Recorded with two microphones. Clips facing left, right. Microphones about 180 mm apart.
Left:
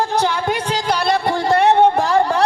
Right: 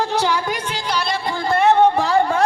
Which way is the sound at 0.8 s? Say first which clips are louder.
Left 5 dB; 55° left (ahead or behind).